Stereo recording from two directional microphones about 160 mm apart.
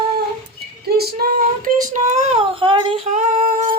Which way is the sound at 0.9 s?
80° right.